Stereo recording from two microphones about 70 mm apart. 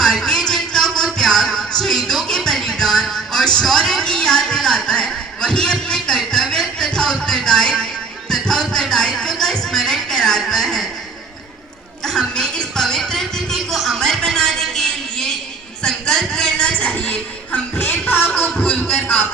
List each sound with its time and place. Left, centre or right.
0.0 s music: centre
5.9 s a sound: centre
8.3 s music: centre
12.0 s music: centre; by 19.2 s left